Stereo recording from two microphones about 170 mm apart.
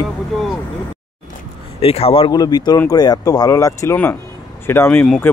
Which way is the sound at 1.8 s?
35° left (ahead or behind).